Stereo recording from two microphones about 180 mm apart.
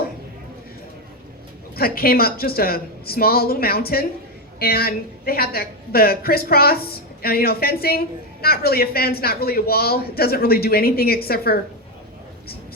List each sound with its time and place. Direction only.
1.7 s a woman's voice: 55° left (ahead or behind)